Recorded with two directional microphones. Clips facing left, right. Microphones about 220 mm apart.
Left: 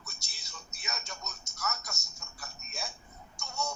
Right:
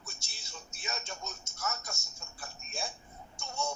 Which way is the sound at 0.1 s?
25° right (ahead or behind).